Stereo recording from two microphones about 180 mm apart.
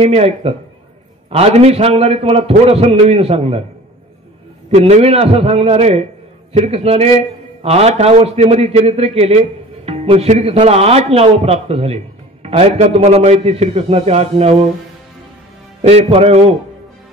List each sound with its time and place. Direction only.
0.0 s a man's voice: 35° right (ahead or behind)
4.6 s a man's voice: 35° right (ahead or behind)
15.8 s a man's voice: 35° right (ahead or behind)